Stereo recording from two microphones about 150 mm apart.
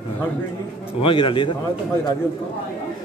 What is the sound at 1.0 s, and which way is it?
Speech, 35° left (ahead or behind).